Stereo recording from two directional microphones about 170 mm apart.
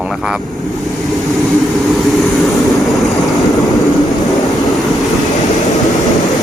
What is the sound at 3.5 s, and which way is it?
Vehicle, 20° left (ahead or behind).